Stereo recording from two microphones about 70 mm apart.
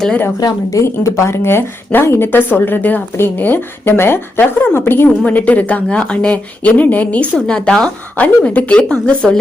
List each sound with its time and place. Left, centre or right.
0.7 s a woman's voice: left
5.0 s a woman's voice: left